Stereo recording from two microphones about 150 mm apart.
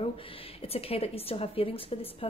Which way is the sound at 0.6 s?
40° left (ahead or behind).